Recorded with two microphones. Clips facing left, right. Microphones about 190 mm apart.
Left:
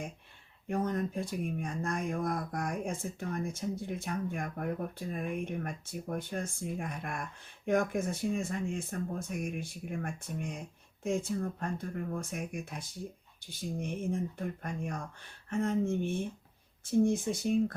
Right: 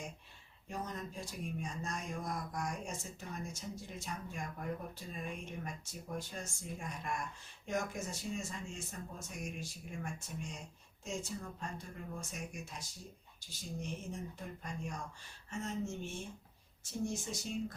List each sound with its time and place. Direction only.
0.7 s speech: 55° left (ahead or behind)